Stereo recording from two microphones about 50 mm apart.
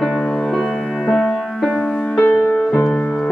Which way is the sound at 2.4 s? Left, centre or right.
Left.